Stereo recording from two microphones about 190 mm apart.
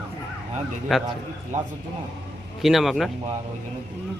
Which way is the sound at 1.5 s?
40° right (ahead or behind).